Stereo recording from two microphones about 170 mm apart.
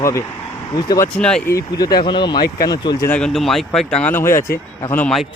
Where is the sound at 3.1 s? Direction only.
5° left (ahead or behind).